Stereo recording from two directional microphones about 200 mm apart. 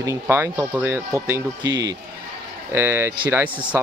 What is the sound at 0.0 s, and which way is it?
Speech, 15° right (ahead or behind).